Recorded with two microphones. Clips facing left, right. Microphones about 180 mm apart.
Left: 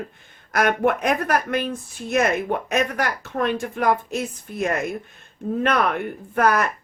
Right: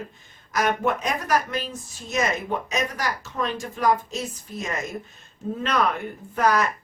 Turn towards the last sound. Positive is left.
turn(degrees=60)  # may be behind; listen again after turning